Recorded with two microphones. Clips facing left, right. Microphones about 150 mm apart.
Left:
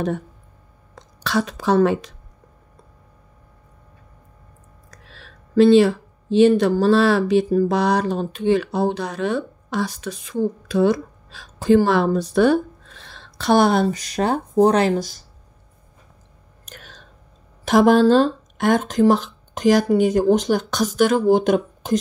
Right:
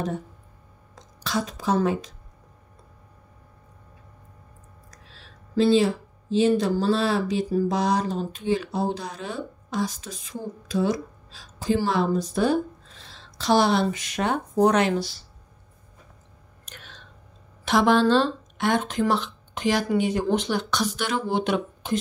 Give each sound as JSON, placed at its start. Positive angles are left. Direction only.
{"t": 0.9, "sound": "speech", "side_deg": 70}
{"t": 4.9, "sound": "speech", "side_deg": 65}
{"t": 13.8, "sound": "speech", "side_deg": 35}
{"t": 16.6, "sound": "clicking", "side_deg": 45}
{"t": 17.6, "sound": "speech", "side_deg": 45}